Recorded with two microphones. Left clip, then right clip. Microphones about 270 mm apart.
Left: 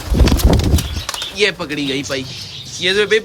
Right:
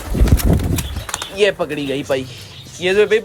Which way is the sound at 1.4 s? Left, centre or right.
Centre.